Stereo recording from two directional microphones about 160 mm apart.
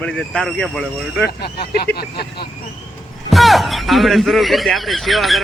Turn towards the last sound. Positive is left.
turn(degrees=0)  # may be behind; listen again after turning